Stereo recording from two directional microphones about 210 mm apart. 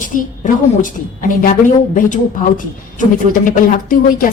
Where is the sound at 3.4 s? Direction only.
40° left (ahead or behind).